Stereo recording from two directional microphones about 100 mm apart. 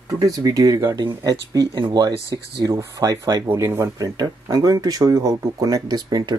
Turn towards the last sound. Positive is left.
turn(degrees=-40)  # may be behind; listen again after turning